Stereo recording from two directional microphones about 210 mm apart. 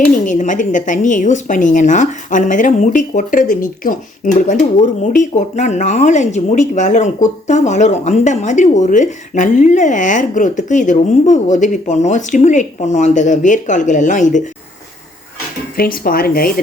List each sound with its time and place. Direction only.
0.3 s speech: 35° left (ahead or behind)
15.8 s speech: 45° left (ahead or behind)